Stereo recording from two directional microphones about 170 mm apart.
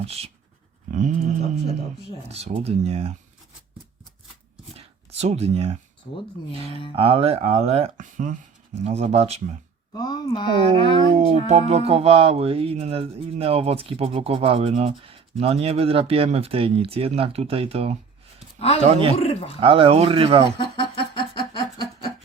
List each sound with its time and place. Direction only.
0.0 s speech: 35° right (ahead or behind)
0.9 s a sound: 45° right (ahead or behind)
2.3 s speech: 40° right (ahead or behind)
4.7 s a sound: 40° right (ahead or behind)
6.9 s speech: 35° right (ahead or behind)
9.9 s speech: 25° left (ahead or behind)
11.3 s speech: 40° right (ahead or behind)
19.1 s speech: 35° left (ahead or behind)
19.5 s speech: 30° right (ahead or behind)
20.6 s a sound: 30° left (ahead or behind)